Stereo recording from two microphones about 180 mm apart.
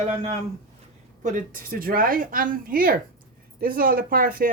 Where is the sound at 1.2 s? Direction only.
45° right (ahead or behind).